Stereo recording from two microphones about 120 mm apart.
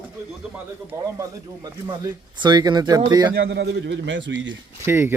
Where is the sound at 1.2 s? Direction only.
30° right (ahead or behind).